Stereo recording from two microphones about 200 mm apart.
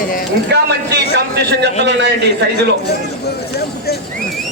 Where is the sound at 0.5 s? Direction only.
55° right (ahead or behind).